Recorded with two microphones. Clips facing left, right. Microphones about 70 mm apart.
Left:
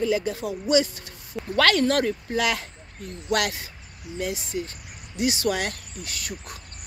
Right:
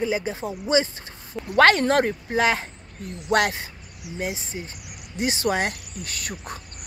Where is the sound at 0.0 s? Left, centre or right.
Right.